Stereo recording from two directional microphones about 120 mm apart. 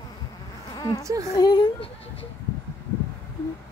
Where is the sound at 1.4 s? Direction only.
35° left (ahead or behind).